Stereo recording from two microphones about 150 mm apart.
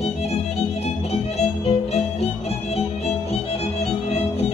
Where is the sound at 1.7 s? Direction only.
40° left (ahead or behind).